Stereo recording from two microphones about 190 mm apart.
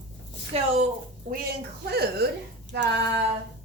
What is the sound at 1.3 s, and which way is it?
A woman's voice, 55° right (ahead or behind).